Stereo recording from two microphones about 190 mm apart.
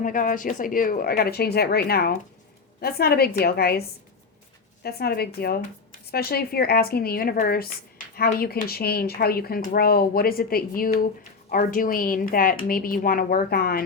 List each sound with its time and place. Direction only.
0.0 s a woman's voice: 45° left (ahead or behind)